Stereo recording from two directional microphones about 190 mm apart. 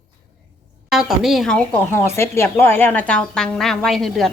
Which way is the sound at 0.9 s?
Centre (ahead or behind).